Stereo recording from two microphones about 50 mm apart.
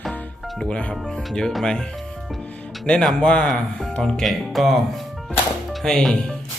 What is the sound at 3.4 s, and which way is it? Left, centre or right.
Speech, centre.